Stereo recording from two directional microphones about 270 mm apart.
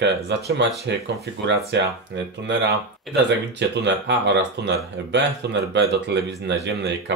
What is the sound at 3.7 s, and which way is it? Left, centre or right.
Speech, right.